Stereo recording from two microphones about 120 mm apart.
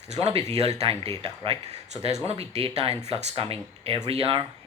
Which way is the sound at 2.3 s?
60° right (ahead or behind).